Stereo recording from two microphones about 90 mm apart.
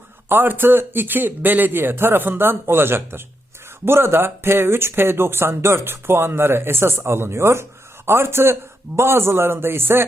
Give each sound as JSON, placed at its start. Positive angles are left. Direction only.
{"t": 0.3, "sound": "speech", "side_deg": -20}